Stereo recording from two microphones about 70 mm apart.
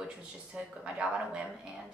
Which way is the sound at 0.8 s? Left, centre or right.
Centre.